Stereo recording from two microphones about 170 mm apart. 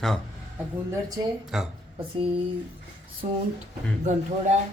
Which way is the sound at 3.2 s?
40° right (ahead or behind).